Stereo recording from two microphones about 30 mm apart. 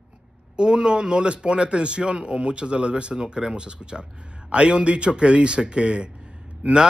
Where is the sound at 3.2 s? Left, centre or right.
Right.